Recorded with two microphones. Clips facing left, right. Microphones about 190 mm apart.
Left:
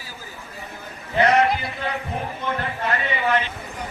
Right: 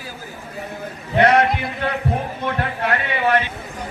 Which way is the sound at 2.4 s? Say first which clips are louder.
Right 2 dB; 60° right (ahead or behind).